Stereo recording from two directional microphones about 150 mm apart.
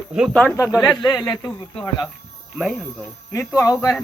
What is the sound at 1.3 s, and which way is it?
Speech, 20° left (ahead or behind).